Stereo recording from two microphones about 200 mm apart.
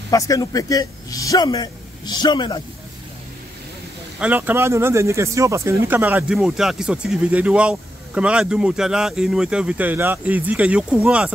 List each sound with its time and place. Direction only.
0.1 s a man's voice: 15° left (ahead or behind)
4.2 s speech: 10° right (ahead or behind)